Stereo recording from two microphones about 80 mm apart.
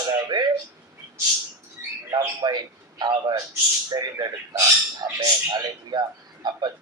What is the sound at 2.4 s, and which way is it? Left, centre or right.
A man's voice, right.